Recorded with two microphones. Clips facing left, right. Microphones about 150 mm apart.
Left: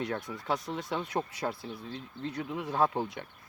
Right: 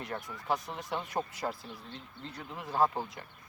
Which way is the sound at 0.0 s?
75° left (ahead or behind).